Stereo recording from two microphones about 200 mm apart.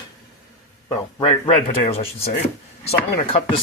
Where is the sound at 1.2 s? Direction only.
30° left (ahead or behind).